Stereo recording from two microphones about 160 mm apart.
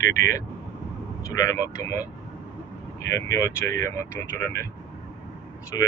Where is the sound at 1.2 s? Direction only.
20° left (ahead or behind).